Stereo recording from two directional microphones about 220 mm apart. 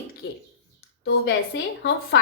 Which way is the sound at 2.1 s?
55° left (ahead or behind).